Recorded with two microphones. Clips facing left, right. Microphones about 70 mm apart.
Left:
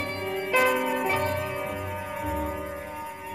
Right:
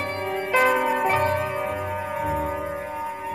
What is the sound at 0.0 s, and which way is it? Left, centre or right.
Music, right.